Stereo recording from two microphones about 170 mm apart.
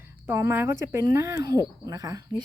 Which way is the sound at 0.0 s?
15° right (ahead or behind).